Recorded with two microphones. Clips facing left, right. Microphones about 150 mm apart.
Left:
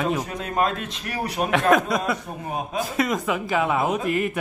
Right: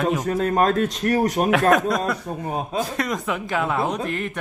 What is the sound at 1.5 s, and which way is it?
A man's voice, centre (ahead or behind).